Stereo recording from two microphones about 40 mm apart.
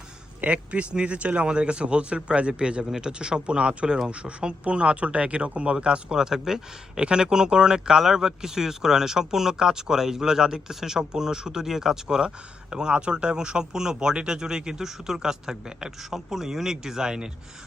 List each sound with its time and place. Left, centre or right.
0.4 s speech: right